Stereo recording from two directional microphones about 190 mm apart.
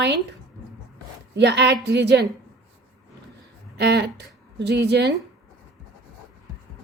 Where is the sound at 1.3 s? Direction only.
65° right (ahead or behind).